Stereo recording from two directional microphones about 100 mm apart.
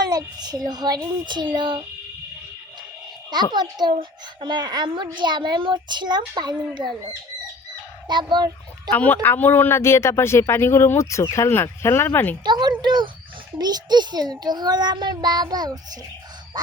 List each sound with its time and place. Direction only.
0.1 s a child's voice: 40° right (ahead or behind)
3.5 s a child's voice: 45° right (ahead or behind)
8.0 s fowl: 50° right (ahead or behind)
8.9 s speech: 20° left (ahead or behind)
12.5 s a child's voice: 45° right (ahead or behind)